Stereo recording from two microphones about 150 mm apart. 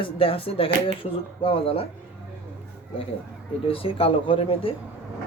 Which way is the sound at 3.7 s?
35° left (ahead or behind).